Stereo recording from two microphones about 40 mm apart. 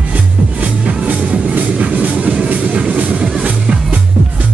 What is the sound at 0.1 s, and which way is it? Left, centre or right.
Music, right.